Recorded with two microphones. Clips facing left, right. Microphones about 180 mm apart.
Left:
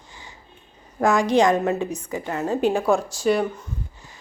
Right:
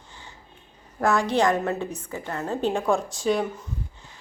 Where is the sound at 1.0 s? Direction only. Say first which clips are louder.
Left 4 dB; 15° left (ahead or behind).